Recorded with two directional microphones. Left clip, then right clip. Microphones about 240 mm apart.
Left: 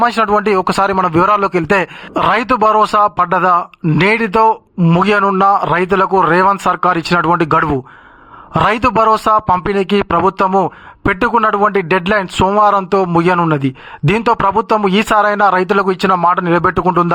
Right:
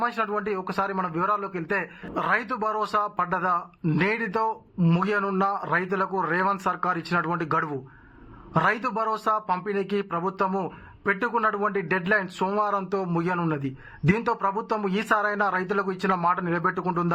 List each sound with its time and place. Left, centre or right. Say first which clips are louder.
0.0 s speech: left 14 dB; left